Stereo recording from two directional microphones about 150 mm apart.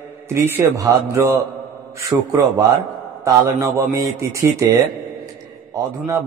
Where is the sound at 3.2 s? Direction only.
20° right (ahead or behind).